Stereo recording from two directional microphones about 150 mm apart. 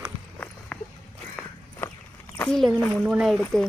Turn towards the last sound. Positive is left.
turn(degrees=-5)  # may be behind; listen again after turning